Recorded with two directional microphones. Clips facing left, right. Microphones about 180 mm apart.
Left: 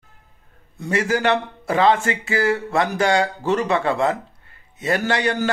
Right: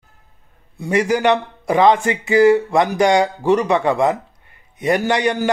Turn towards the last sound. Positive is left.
turn(degrees=-15)  # may be behind; listen again after turning